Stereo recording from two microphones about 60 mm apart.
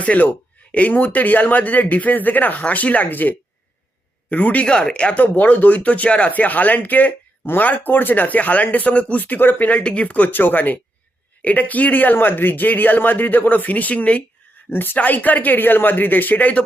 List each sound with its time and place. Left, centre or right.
0.0 s speech: left
5.2 s speech: left
14.7 s speech: left